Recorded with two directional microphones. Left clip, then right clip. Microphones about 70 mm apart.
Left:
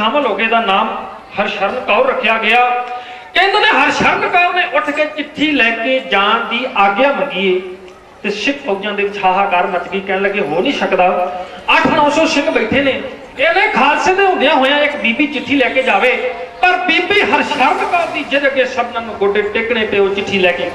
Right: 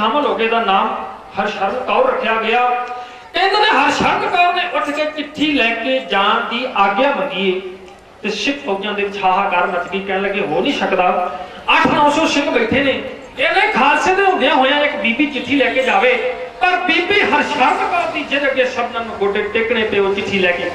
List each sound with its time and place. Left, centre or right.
0.0 s a man's voice: centre
8.3 s a man's voice: left
13.4 s a man's voice: centre